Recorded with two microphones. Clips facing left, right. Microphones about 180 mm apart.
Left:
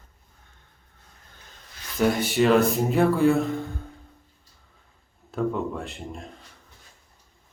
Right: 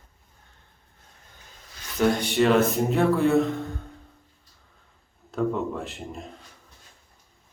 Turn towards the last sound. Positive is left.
turn(degrees=0)  # may be behind; listen again after turning